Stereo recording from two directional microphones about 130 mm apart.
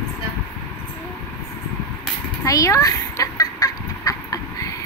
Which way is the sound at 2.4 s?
25° left (ahead or behind).